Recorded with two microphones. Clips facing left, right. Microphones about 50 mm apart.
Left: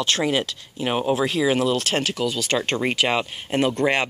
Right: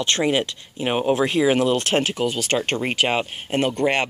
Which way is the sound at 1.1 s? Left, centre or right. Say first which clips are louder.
Right 2 dB; right.